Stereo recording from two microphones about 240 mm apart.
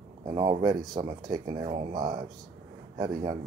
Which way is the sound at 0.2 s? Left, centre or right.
Centre.